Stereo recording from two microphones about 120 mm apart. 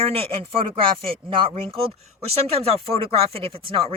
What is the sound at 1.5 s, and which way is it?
A woman's voice, 60° right (ahead or behind).